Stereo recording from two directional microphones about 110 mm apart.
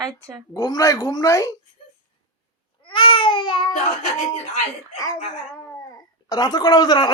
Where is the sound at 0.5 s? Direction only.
35° left (ahead or behind).